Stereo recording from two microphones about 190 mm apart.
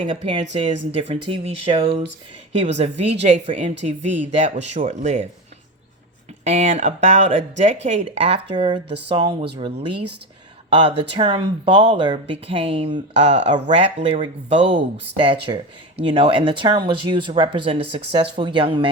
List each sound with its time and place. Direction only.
0.0 s speech: 25° right (ahead or behind)
6.4 s speech: 35° right (ahead or behind)